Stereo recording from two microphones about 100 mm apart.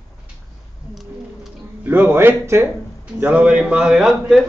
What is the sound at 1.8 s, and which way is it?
Speech, 20° right (ahead or behind).